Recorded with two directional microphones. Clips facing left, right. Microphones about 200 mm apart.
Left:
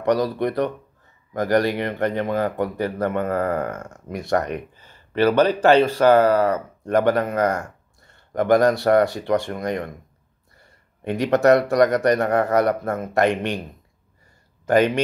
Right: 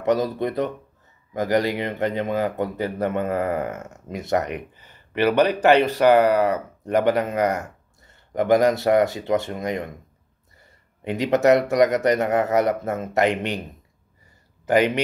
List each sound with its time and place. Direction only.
0.0 s speech: 20° right (ahead or behind)
11.1 s speech: 20° right (ahead or behind)
14.7 s speech: 15° right (ahead or behind)